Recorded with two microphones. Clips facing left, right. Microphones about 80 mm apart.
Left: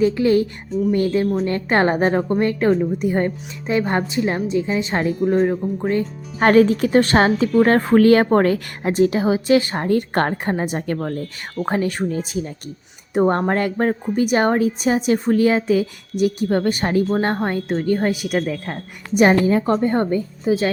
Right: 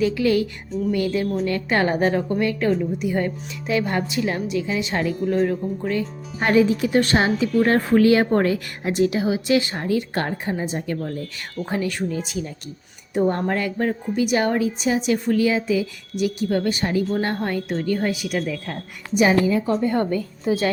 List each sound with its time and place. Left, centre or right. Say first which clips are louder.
0.0 s a woman's voice: left 3 dB; left
11.6 s a woman's voice: left 4 dB; left
20.0 s a woman's voice: left 2 dB; left
20.5 s a woman's voice: left 3 dB; centre